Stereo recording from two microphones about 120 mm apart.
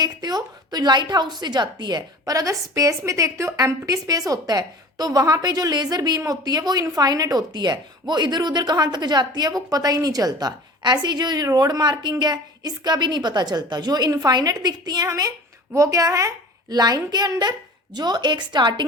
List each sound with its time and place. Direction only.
0.0 s a woman's voice: 35° right (ahead or behind)